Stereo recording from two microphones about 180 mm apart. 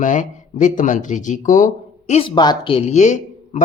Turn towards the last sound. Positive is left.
turn(degrees=40)  # may be behind; listen again after turning